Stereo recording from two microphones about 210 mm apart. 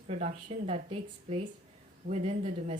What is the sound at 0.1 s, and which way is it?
A woman's voice, 30° right (ahead or behind).